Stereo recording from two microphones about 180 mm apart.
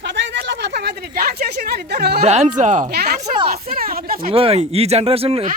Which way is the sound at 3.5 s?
55° right (ahead or behind).